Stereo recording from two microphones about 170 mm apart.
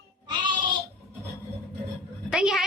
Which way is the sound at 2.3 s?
5° right (ahead or behind).